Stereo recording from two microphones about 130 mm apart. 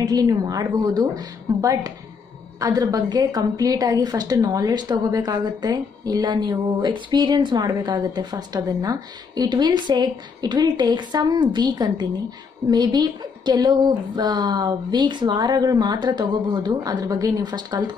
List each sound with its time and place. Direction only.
0.0 s a woman's voice: 30° right (ahead or behind)